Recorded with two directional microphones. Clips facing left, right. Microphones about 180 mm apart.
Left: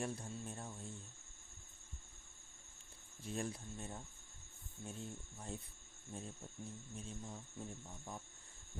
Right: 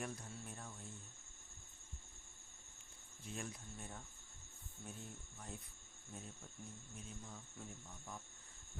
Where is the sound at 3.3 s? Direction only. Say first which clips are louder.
Left 6 dB; 35° left (ahead or behind).